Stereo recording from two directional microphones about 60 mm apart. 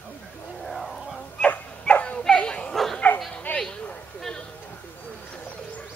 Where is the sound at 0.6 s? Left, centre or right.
Centre.